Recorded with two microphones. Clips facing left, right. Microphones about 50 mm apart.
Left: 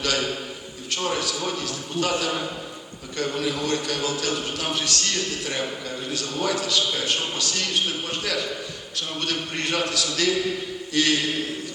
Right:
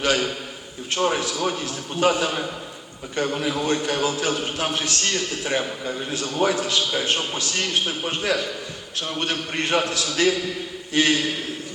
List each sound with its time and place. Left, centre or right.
0.0 s a man's voice: right